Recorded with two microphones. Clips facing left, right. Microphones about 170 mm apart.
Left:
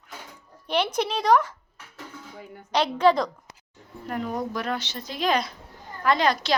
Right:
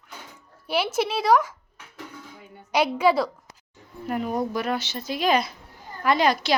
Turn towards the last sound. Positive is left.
turn(degrees=-10)  # may be behind; listen again after turning